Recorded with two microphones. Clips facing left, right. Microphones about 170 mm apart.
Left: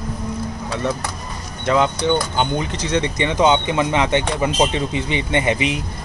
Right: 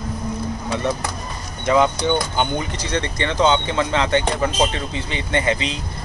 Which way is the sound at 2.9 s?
15° left (ahead or behind).